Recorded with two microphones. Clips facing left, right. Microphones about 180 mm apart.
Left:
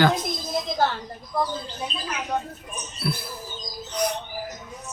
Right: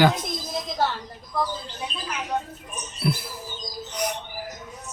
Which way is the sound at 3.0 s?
20° right (ahead or behind).